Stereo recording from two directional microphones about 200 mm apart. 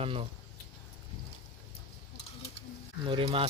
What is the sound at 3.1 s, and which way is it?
Speech, 25° right (ahead or behind).